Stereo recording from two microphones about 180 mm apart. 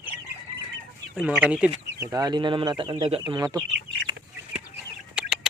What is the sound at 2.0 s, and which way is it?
Speech, 20° right (ahead or behind).